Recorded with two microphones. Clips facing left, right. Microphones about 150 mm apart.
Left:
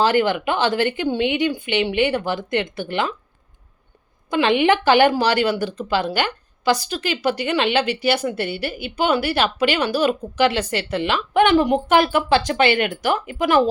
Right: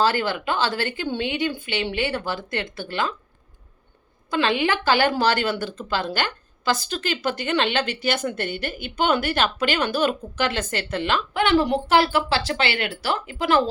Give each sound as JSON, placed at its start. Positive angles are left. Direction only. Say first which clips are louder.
{"t": 0.0, "sound": "speech", "louder": "left 4 dB", "side_deg": 20}
{"t": 4.3, "sound": "speech", "louder": "left 5 dB", "side_deg": 20}